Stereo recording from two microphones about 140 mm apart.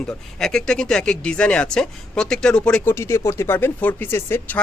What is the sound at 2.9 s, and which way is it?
Speech, 20° left (ahead or behind).